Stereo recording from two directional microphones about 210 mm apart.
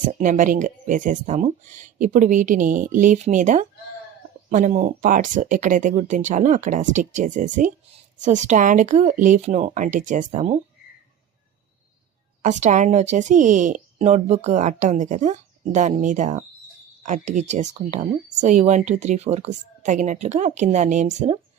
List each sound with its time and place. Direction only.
0.0 s speech: 40° right (ahead or behind)
12.4 s speech: 35° right (ahead or behind)